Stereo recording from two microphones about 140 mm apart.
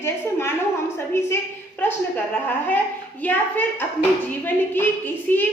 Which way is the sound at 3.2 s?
10° left (ahead or behind).